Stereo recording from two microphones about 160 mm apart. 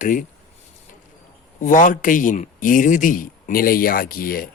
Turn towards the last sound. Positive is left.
turn(degrees=65)  # may be behind; listen again after turning